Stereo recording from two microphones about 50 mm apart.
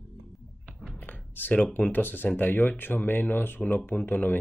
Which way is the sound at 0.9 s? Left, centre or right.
Left.